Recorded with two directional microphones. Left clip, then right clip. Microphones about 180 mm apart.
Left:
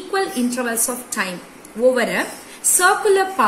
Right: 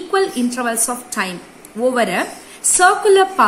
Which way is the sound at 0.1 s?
35° right (ahead or behind).